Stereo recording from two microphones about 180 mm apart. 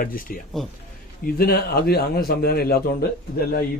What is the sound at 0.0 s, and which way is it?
A man's voice, 50° left (ahead or behind).